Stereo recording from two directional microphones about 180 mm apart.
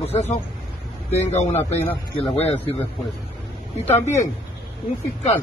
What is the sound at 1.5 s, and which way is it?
Speech, 15° left (ahead or behind).